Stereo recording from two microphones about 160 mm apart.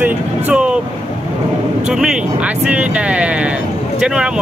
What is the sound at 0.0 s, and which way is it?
Vehicle, 5° right (ahead or behind).